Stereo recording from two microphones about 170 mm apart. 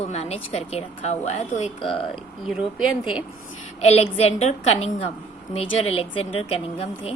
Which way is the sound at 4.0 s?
40° left (ahead or behind).